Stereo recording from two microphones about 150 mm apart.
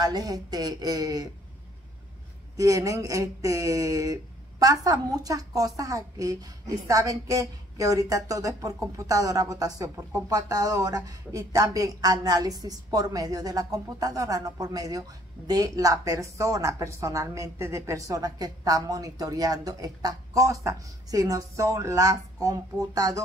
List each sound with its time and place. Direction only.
0.0 s speech: 25° right (ahead or behind)
2.5 s speech: 25° right (ahead or behind)